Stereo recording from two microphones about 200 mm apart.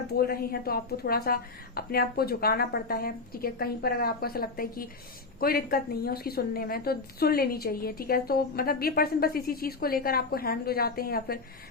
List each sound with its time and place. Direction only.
0.1 s a woman's voice: 50° left (ahead or behind)